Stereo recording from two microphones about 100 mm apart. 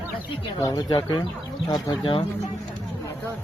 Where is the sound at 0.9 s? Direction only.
50° left (ahead or behind).